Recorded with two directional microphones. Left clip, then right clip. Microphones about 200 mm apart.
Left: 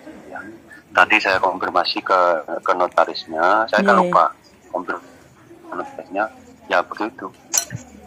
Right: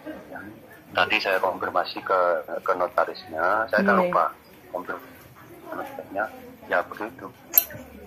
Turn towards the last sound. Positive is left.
turn(degrees=15)  # may be behind; listen again after turning